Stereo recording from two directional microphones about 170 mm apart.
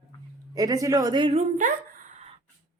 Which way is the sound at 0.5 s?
20° right (ahead or behind).